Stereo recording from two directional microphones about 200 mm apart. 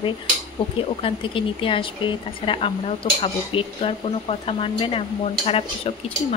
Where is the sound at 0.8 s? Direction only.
25° left (ahead or behind).